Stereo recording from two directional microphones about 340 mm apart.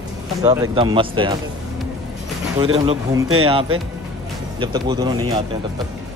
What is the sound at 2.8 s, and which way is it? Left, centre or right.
Speech, centre.